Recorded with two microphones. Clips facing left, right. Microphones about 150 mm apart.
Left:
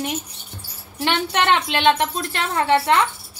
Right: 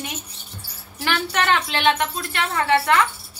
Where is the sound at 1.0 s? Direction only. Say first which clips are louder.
Left 2 dB; 25° left (ahead or behind).